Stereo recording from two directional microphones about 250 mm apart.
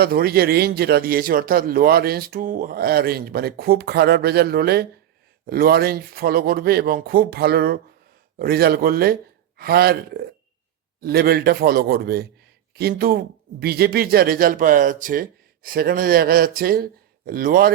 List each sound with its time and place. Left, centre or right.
0.0 s a man's voice: right